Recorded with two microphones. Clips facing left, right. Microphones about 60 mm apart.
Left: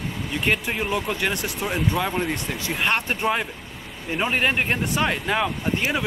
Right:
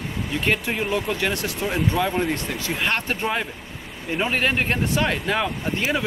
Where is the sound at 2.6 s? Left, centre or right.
Centre.